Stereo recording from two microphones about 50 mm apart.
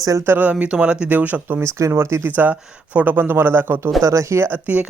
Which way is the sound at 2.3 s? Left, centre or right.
Right.